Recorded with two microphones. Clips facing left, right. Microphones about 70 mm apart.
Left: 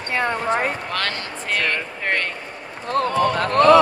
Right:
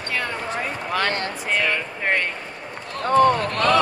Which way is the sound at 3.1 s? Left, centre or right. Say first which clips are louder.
Right 7 dB; right.